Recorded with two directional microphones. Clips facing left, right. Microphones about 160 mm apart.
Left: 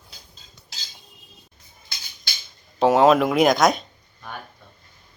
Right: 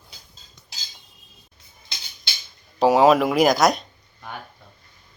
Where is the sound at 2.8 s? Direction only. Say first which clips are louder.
Even; centre (ahead or behind).